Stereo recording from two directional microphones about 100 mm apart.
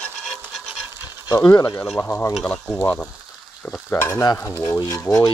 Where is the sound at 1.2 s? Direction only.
40° left (ahead or behind).